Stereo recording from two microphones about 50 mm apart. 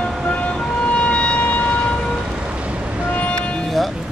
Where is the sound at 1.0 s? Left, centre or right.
Left.